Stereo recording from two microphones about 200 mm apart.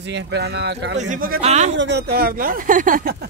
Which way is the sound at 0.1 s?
60° right (ahead or behind).